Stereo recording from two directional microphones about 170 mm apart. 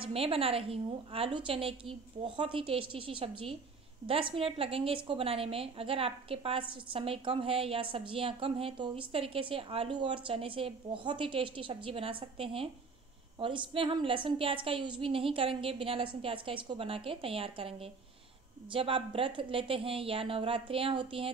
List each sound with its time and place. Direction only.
0.0 s a woman's voice: 35° right (ahead or behind)